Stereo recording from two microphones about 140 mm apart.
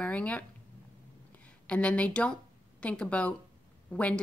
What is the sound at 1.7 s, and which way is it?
A woman's voice, 10° left (ahead or behind).